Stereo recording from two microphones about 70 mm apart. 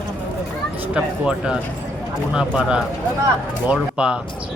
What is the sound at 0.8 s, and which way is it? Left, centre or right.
Speech, centre.